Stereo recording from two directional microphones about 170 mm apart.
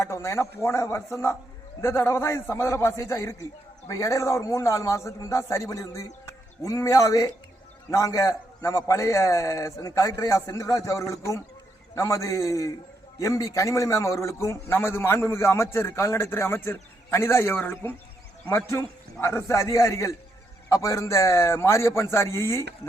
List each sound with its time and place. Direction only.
0.0 s a man's voice: 15° left (ahead or behind)